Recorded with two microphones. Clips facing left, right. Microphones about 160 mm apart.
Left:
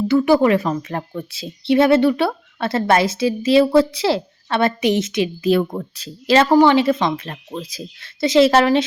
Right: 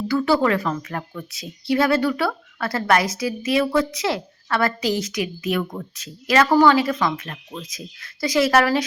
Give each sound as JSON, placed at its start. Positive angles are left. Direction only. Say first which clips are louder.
{"t": 0.1, "sound": "speech", "louder": "left 4 dB", "side_deg": 20}